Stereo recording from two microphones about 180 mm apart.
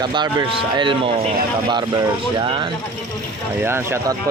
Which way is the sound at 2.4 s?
30° right (ahead or behind).